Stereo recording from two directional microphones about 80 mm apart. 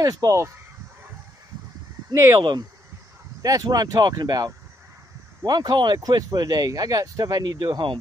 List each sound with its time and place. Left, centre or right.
0.0 s speech: right
2.1 s speech: right
3.4 s speech: right